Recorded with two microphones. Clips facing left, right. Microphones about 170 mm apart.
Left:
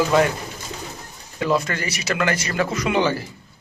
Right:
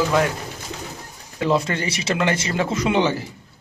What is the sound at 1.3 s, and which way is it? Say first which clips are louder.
Speech: right 1 dB; 25° right (ahead or behind).